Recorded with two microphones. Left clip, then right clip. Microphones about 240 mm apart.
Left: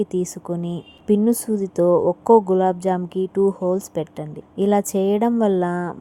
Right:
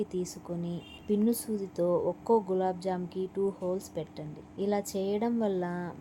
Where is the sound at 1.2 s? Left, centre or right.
Left.